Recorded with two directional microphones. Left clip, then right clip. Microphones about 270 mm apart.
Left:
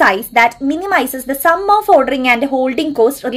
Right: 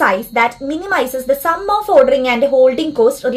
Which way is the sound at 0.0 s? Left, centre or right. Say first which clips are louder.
Left 3 dB; left.